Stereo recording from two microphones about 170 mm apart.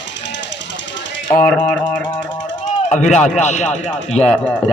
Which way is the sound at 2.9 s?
45° left (ahead or behind).